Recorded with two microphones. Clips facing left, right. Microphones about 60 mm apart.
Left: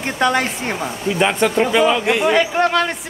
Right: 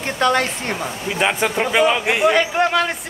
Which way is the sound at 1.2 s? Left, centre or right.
Centre.